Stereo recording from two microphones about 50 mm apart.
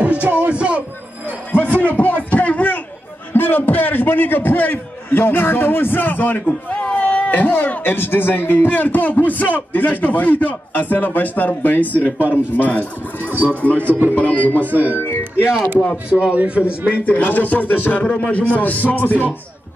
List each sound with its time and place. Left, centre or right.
0.0 s music: right
1.5 s a sound: left
3.3 s speech: left
6.7 s speech: left
13.2 s speech: right
14.1 s speech: left
15.0 s music: left
16.1 s a man's voice: right
16.9 s a man's voice: left